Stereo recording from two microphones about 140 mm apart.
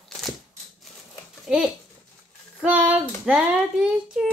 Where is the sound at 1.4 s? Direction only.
5° right (ahead or behind).